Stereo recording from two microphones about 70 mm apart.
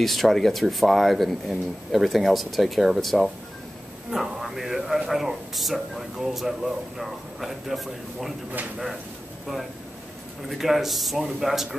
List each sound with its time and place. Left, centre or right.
0.0 s speech: centre
10.5 s speech: centre